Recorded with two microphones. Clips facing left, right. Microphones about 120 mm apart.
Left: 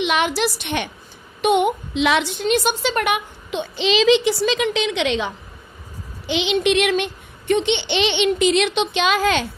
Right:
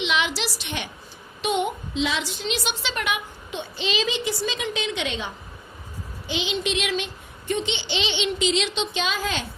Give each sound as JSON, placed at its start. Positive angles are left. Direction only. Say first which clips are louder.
{"t": 0.0, "sound": "a woman's voice", "louder": "left 6 dB", "side_deg": 50}
{"t": 6.2, "sound": "a child's voice", "louder": "left 8 dB", "side_deg": 70}